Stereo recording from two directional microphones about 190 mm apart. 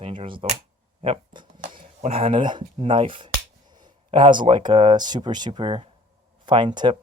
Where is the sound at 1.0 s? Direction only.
25° right (ahead or behind).